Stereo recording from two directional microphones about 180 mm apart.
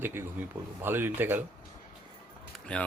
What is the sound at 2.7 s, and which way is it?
Speech, 5° left (ahead or behind).